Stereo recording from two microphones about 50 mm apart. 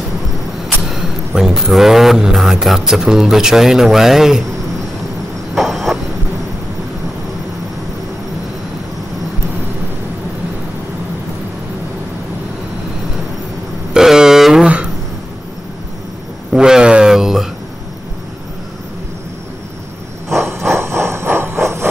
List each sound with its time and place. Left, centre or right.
0.8 s speech: centre
5.5 s vehicle: centre
13.9 s vehicle: centre
16.5 s a sound: centre
20.4 s train: right